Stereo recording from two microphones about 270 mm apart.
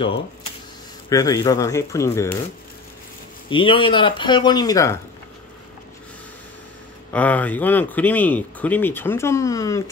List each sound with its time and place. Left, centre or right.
1.0 s speech: centre
3.4 s speech: centre
7.1 s speech: centre